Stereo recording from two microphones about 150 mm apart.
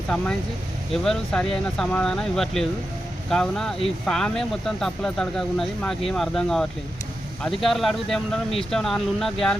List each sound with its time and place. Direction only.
0.9 s speech: 5° left (ahead or behind)